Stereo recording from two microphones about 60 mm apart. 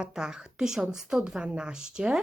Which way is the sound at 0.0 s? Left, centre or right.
Centre.